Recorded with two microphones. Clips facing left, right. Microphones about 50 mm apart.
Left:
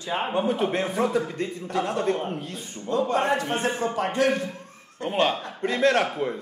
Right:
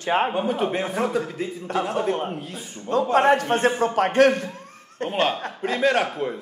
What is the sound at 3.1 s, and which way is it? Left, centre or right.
A man's voice, right.